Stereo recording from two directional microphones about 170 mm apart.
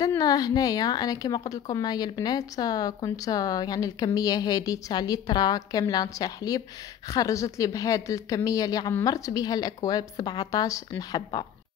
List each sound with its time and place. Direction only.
0.0 s a woman's voice: 20° left (ahead or behind)